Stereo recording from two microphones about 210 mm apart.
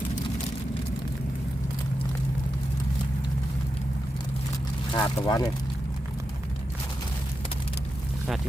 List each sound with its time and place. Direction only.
4.9 s speech: 20° left (ahead or behind)